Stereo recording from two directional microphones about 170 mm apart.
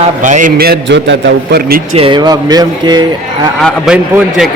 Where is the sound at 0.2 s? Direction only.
50° right (ahead or behind); by 1.1 s 90° right.